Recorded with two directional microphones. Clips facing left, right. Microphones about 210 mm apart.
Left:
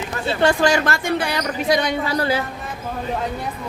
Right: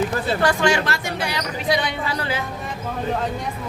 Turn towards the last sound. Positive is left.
turn(degrees=40)  # may be behind; listen again after turning